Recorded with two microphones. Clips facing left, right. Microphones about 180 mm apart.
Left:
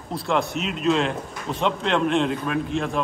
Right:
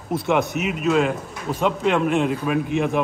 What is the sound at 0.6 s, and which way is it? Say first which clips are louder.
A man's voice: right 2 dB; 5° right (ahead or behind).